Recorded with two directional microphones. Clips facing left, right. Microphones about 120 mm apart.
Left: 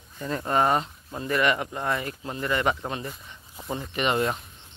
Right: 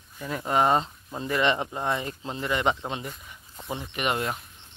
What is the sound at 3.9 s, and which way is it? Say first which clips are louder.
Speech: left 3 dB; 5° right (ahead or behind).